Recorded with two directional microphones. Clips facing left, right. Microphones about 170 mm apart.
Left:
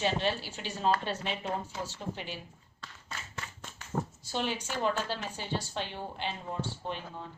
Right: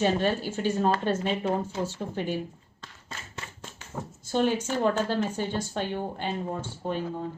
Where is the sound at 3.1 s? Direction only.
25° right (ahead or behind).